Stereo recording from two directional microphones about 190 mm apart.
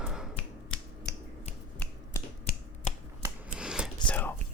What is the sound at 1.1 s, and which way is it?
Finger snapping, 60° left (ahead or behind).